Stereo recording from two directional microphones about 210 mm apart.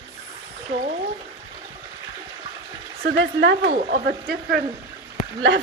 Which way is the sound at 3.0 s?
60° right (ahead or behind).